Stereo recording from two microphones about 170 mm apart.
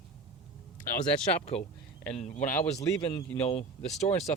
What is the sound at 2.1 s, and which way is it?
Speech, 45° left (ahead or behind).